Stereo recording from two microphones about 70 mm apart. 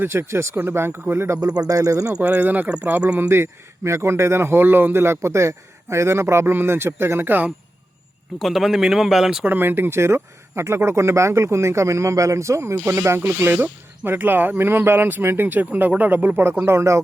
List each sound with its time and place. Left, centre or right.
0.0 s speech: right
1.4 s a man's voice: right
2.2 s speech: right
3.2 s speech: right
8.4 s speech: centre
9.5 s speech: right
16.4 s speech: right